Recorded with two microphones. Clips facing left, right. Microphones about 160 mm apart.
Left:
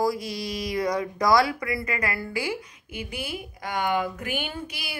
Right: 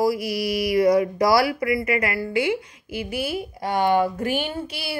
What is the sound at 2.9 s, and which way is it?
Speech, 20° left (ahead or behind).